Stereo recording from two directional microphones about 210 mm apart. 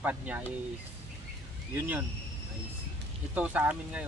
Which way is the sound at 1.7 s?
10° right (ahead or behind).